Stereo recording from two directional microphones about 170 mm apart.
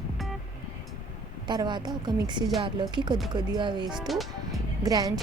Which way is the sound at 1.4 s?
25° right (ahead or behind).